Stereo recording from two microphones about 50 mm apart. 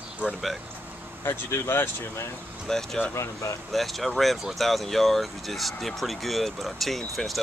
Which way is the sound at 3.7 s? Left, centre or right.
Centre.